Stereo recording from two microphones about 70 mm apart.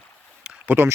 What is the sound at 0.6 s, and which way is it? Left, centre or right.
Speech, right.